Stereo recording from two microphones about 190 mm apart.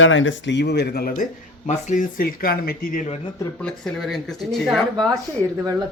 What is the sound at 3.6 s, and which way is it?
Speech, 5° left (ahead or behind).